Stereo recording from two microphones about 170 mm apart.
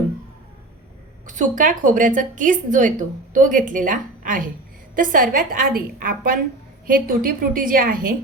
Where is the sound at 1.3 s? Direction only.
50° right (ahead or behind).